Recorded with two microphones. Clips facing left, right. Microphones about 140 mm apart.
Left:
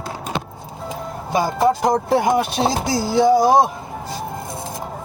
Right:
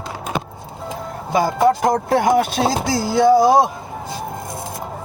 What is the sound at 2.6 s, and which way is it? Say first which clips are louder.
Speech: right 1 dB; 15° left (ahead or behind).